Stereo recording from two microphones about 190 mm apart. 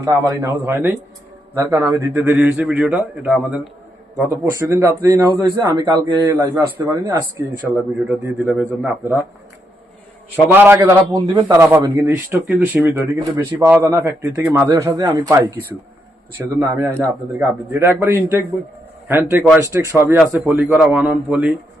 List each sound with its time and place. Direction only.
0.0 s a man's voice: 15° right (ahead or behind)
4.1 s a man's voice: 15° right (ahead or behind)
10.5 s a man's voice: 10° right (ahead or behind)
20.1 s a man's voice: 5° right (ahead or behind)